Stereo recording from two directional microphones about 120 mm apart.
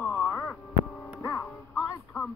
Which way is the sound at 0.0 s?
15° left (ahead or behind).